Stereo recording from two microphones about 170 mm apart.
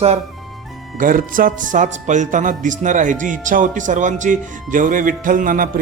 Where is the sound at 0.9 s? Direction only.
55° right (ahead or behind).